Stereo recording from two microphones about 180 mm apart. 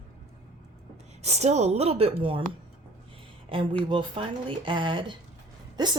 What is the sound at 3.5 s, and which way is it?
Speech, 25° right (ahead or behind).